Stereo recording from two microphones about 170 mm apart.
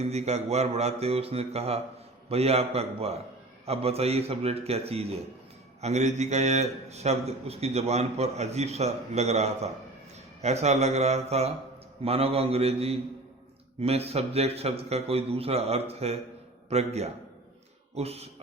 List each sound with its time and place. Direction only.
0.0 s a man's voice: 40° right (ahead or behind)